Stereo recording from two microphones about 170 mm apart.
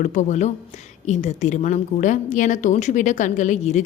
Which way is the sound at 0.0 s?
45° left (ahead or behind).